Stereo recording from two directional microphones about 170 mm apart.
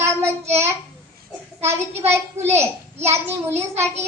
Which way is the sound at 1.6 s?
15° right (ahead or behind).